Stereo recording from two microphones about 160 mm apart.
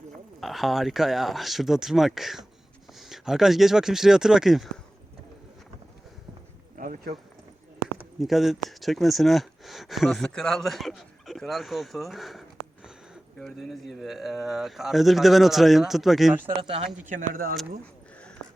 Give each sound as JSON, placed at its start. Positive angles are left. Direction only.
{"t": 0.3, "sound": "speech", "side_deg": 0}
{"t": 6.7, "sound": "a sound", "side_deg": -55}
{"t": 8.2, "sound": "speech", "side_deg": 0}
{"t": 16.6, "sound": "speech", "side_deg": -35}
{"t": 17.1, "sound": "speech", "side_deg": -60}